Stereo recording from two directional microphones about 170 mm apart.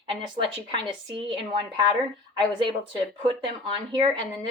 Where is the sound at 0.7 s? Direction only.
30° right (ahead or behind).